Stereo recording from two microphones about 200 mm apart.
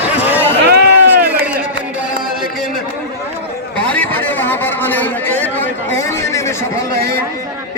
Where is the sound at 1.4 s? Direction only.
5° right (ahead or behind).